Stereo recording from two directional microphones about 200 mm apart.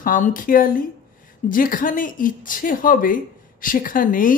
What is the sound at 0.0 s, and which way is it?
A woman's voice, 40° left (ahead or behind).